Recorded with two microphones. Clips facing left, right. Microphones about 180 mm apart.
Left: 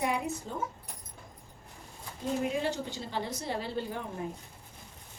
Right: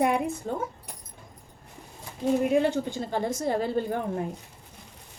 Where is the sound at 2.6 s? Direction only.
55° right (ahead or behind).